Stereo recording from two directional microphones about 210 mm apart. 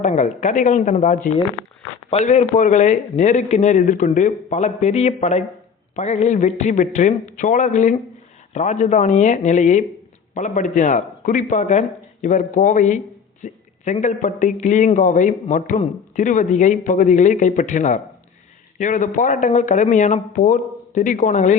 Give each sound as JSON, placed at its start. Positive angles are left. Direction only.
{"t": 0.0, "sound": "speech", "side_deg": 35}